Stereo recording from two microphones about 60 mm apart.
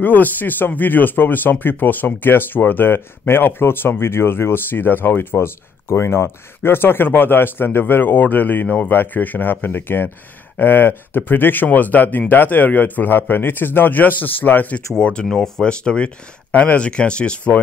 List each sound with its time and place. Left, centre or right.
0.0 s speech: left
15.0 s speech: centre